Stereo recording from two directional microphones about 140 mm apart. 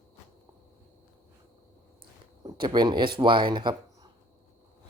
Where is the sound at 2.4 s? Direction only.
35° right (ahead or behind).